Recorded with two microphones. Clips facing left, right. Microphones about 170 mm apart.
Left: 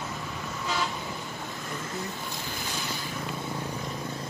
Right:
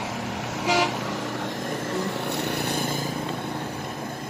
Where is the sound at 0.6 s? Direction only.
85° right.